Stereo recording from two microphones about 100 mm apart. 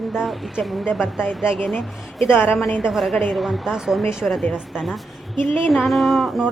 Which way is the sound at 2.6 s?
Centre (ahead or behind).